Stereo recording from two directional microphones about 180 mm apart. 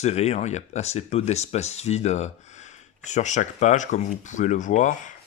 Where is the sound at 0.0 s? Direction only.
40° left (ahead or behind).